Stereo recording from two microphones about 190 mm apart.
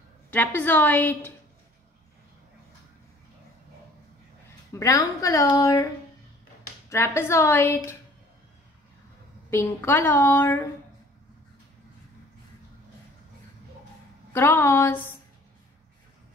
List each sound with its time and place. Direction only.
0.6 s a woman's voice: 10° left (ahead or behind)
4.7 s a woman's voice: 15° left (ahead or behind)
6.9 s a woman's voice: 15° left (ahead or behind)
9.5 s a woman's voice: 10° left (ahead or behind)
14.3 s a woman's voice: 15° left (ahead or behind)